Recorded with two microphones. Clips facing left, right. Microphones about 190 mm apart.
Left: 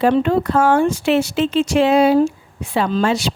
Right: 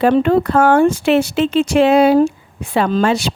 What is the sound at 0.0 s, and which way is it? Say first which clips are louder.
A woman's voice: right 3 dB; 60° right (ahead or behind).